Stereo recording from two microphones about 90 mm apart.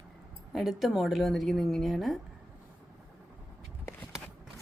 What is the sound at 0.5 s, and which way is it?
Speech, centre (ahead or behind).